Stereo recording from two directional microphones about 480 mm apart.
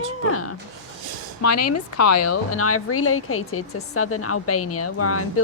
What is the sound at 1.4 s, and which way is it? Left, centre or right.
A woman's voice, left.